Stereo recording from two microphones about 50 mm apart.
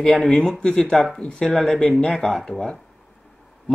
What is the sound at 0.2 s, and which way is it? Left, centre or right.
Speech, centre.